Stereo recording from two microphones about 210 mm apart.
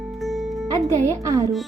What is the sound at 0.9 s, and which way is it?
Music, 15° right (ahead or behind).